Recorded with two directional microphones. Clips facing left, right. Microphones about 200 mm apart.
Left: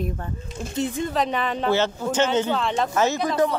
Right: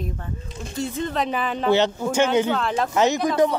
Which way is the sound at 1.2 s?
Centre (ahead or behind).